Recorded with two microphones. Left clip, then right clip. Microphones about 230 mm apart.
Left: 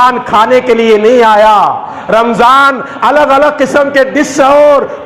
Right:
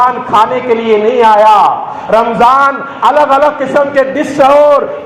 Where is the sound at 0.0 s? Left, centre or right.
Left.